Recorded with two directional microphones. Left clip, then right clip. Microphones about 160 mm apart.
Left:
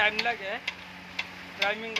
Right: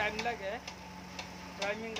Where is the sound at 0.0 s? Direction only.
10° left (ahead or behind).